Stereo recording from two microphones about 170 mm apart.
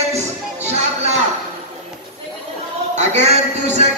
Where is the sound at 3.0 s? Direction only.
40° right (ahead or behind).